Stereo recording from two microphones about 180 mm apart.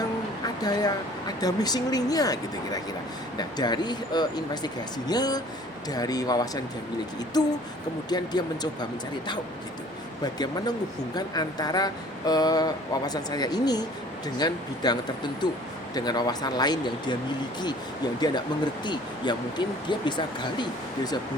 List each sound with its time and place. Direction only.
0.6 s speech: 20° left (ahead or behind)